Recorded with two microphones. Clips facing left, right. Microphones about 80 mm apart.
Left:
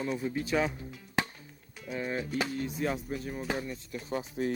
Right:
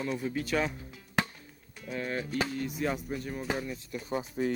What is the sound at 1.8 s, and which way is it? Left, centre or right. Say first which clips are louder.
Speech: even; centre.